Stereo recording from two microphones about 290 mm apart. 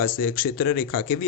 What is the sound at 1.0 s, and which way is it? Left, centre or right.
Speech, left.